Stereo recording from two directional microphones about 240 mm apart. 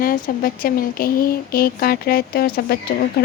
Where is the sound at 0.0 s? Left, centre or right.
Left.